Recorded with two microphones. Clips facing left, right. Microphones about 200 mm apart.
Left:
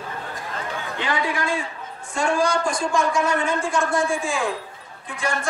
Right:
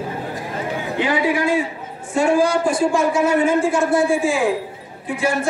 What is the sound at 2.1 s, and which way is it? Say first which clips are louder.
A man's voice: right 5 dB; 5° right (ahead or behind).